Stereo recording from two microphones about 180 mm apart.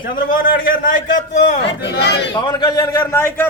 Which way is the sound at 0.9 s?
45° left (ahead or behind).